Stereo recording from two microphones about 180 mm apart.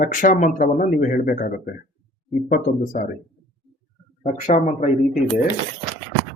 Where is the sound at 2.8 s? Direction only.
45° left (ahead or behind).